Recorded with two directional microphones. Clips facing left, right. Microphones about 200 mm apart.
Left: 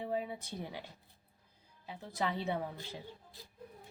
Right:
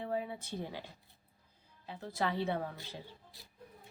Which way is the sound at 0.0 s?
15° left (ahead or behind).